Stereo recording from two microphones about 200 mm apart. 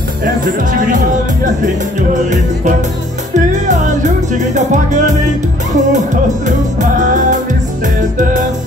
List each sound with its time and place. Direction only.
0.2 s music: 40° right (ahead or behind)